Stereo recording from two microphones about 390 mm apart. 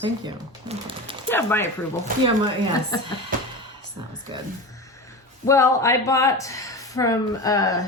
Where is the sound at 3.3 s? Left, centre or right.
Right.